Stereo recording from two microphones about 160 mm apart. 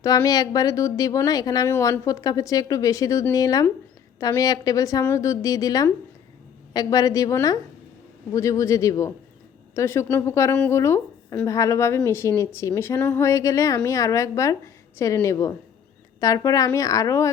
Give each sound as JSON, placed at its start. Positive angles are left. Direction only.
{"t": 0.0, "sound": "a woman's voice", "side_deg": 20}